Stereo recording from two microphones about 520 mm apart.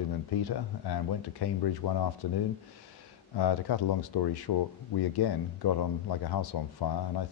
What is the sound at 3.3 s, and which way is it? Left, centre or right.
Speech, left.